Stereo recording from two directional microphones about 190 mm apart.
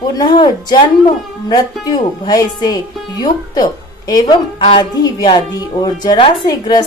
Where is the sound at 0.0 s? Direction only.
20° left (ahead or behind).